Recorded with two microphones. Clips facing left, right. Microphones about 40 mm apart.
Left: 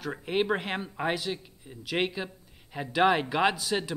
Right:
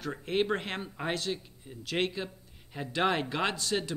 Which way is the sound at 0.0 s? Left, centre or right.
Centre.